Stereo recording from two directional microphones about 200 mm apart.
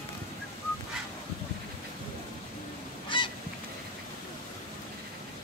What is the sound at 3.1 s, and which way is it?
Goose, 25° left (ahead or behind).